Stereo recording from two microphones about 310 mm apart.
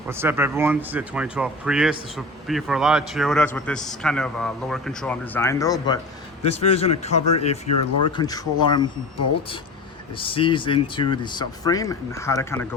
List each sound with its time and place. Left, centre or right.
0.1 s speech: centre
10.2 s speech: centre